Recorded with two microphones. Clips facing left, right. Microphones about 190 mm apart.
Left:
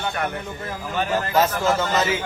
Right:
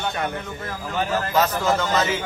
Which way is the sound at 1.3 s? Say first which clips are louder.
Left 1 dB; 10° left (ahead or behind).